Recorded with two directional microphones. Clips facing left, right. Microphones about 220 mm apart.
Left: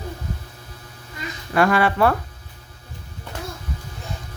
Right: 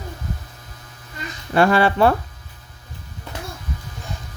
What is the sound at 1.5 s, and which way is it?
Speech, 30° right (ahead or behind).